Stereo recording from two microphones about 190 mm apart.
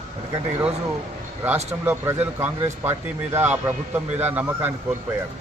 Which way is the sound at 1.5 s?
35° right (ahead or behind).